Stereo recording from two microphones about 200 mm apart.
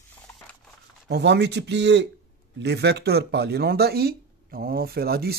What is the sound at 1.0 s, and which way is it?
Speech, 60° right (ahead or behind).